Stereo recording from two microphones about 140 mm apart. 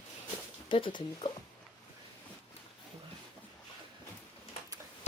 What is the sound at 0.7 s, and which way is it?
Speech, 35° left (ahead or behind).